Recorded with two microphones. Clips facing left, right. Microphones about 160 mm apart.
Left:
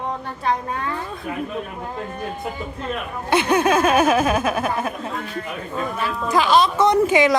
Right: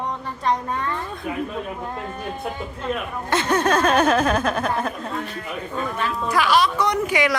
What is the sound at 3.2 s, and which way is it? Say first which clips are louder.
Speech: left 3 dB; 15° left (ahead or behind).